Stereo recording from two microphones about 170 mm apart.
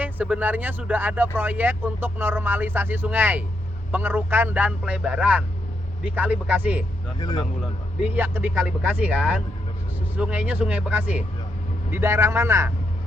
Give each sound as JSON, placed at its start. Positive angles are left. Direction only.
{"t": 0.0, "sound": "speech", "side_deg": -10}
{"t": 7.2, "sound": "speech", "side_deg": 25}
{"t": 7.6, "sound": "speech", "side_deg": -10}